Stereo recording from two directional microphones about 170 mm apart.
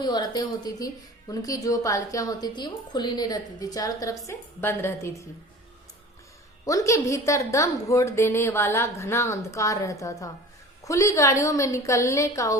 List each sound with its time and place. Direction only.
0.0 s a woman's voice: 25° left (ahead or behind)
6.7 s a woman's voice: 20° left (ahead or behind)